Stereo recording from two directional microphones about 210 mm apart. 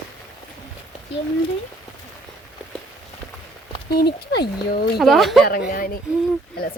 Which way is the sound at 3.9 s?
50° left (ahead or behind).